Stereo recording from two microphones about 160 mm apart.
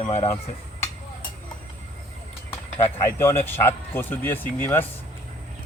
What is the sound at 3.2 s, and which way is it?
Speech, 15° left (ahead or behind).